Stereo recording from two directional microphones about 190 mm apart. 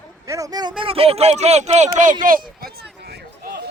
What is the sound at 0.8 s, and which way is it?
Speech, 30° right (ahead or behind).